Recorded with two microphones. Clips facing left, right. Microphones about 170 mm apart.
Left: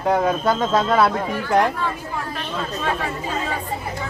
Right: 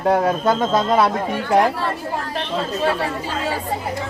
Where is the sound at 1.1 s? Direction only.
25° right (ahead or behind).